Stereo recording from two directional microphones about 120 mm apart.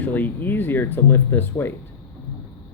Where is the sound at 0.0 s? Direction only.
15° left (ahead or behind).